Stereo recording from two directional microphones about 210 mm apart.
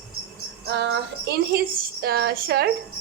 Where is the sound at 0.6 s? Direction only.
55° right (ahead or behind).